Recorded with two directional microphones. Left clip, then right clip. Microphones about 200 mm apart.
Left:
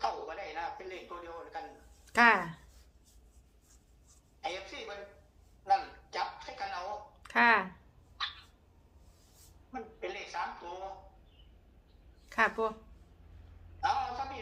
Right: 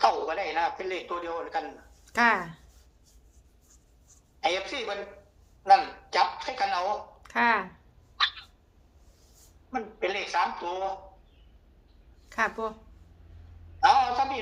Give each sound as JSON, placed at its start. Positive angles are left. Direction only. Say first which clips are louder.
{"t": 0.0, "sound": "a man's voice", "louder": "right 11 dB", "side_deg": -55}
{"t": 2.0, "sound": "speech", "louder": "right 1 dB", "side_deg": 0}
{"t": 4.4, "sound": "a woman's voice", "louder": "right 11 dB", "side_deg": -55}
{"t": 7.2, "sound": "speech", "louder": "even", "side_deg": 0}
{"t": 9.7, "sound": "speech", "louder": "right 11 dB", "side_deg": -55}
{"t": 12.3, "sound": "speech", "louder": "right 1 dB", "side_deg": 0}
{"t": 13.8, "sound": "a woman's voice", "louder": "right 11 dB", "side_deg": -55}